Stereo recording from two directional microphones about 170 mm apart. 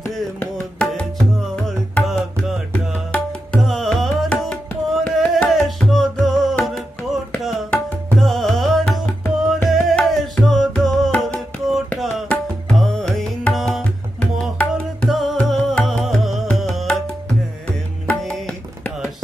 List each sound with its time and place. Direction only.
0.4 s music: 5° left (ahead or behind)
3.6 s music: centre (ahead or behind)
7.4 s tabla: centre (ahead or behind)
9.7 s music: centre (ahead or behind)
18.0 s music: 5° left (ahead or behind)